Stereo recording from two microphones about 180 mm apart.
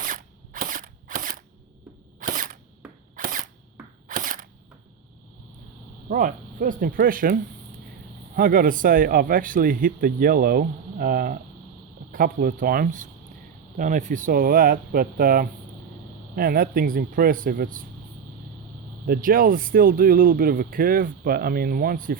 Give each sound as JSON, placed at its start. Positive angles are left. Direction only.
{"t": 0.0, "sound": "cap gun", "side_deg": -50}
{"t": 2.2, "sound": "camera", "side_deg": -50}
{"t": 2.8, "sound": "a sound", "side_deg": -5}
{"t": 3.2, "sound": "a sound", "side_deg": -50}
{"t": 6.1, "sound": "speech", "side_deg": -50}
{"t": 8.4, "sound": "speech", "side_deg": -50}
{"t": 19.0, "sound": "speech", "side_deg": -55}